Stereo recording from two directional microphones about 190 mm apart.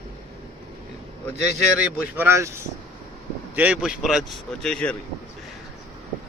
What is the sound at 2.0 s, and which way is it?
Speech, 10° right (ahead or behind).